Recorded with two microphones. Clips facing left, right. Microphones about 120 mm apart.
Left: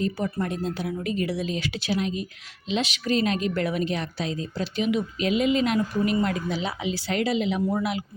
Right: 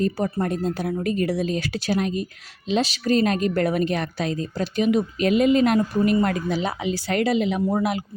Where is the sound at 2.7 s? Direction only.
35° right (ahead or behind).